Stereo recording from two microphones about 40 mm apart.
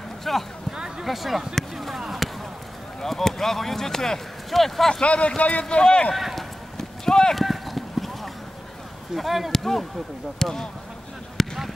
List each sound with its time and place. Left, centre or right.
0.2 s speech: centre
0.7 s a sound: centre
1.0 s speech: centre
1.5 s a sound: centre
3.0 s speech: centre
5.0 s speech: left
5.7 s speech: left
6.1 s run: centre
7.1 s speech: centre
7.3 s clip-clop: centre
9.1 s speech: centre
11.4 s a sound: centre